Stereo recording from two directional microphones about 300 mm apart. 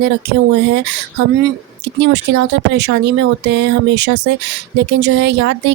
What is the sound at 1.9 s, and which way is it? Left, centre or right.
Speech, right.